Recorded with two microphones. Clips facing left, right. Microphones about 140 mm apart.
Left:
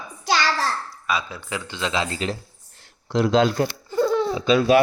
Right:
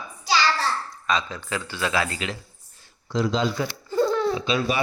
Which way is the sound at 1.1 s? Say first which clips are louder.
Right 1 dB; 10° left (ahead or behind).